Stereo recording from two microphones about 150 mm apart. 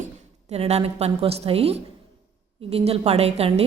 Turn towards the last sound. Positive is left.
turn(degrees=-45)  # may be behind; listen again after turning